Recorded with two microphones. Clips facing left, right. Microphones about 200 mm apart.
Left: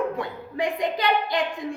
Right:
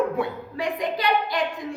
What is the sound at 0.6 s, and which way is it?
Speech, 20° left (ahead or behind).